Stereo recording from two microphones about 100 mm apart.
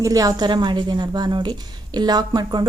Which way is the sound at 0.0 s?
35° right (ahead or behind).